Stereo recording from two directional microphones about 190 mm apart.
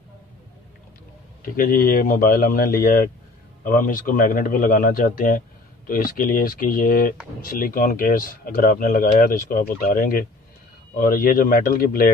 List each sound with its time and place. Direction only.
1.6 s speech: 50° left (ahead or behind)